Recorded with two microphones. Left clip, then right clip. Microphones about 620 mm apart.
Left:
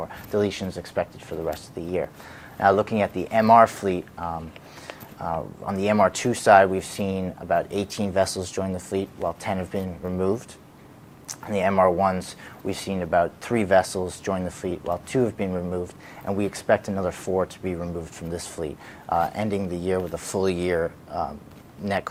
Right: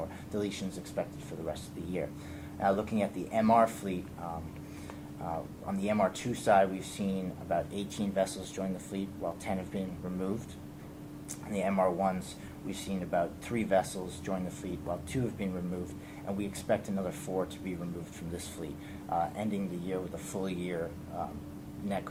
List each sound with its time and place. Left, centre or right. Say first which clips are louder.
0.3 s speech: left 12 dB; left
2.6 s speech: left 10 dB; left
11.3 s speech: left 10 dB; left